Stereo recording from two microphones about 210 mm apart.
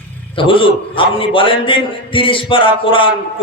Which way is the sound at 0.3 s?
25° left (ahead or behind).